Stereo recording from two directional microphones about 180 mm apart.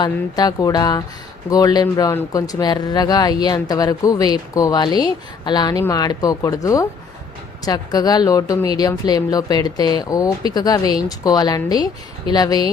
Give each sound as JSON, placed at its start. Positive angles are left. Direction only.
{"t": 0.0, "sound": "speech", "side_deg": 20}